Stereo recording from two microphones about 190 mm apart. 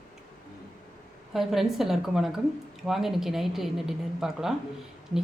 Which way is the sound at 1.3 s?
Centre (ahead or behind).